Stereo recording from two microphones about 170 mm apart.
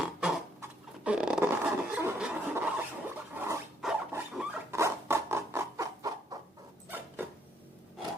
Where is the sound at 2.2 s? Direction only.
10° right (ahead or behind).